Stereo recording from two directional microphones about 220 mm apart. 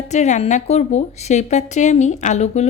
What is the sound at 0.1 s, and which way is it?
A woman's voice, 30° left (ahead or behind).